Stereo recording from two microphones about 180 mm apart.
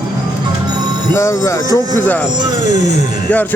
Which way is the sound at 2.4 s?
25° right (ahead or behind).